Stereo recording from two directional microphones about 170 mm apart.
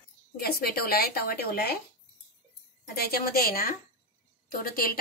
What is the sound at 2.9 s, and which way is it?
Speech, 65° left (ahead or behind).